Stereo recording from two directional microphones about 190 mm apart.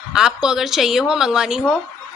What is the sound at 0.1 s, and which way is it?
A woman's voice, 5° right (ahead or behind).